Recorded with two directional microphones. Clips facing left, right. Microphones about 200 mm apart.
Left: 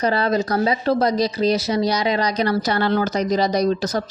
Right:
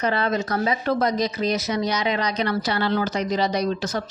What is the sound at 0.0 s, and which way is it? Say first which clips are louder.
Speech: left 4 dB; 35° left (ahead or behind).